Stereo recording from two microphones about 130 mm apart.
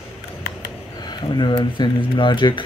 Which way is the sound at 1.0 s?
35° left (ahead or behind).